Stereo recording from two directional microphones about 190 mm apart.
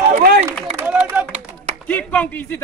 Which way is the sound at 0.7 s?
5° right (ahead or behind).